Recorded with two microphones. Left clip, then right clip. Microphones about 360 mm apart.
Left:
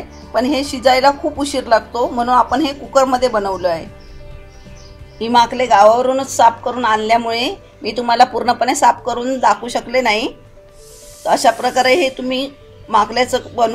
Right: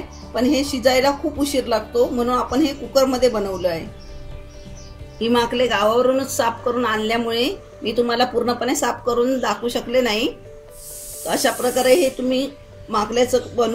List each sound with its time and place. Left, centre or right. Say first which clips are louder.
0.4 s a woman's voice: left 3 dB; centre
5.2 s a woman's voice: left 5 dB; centre